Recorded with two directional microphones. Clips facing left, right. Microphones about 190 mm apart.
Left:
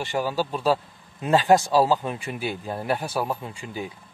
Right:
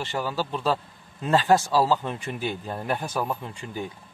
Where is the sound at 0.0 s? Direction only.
10° left (ahead or behind).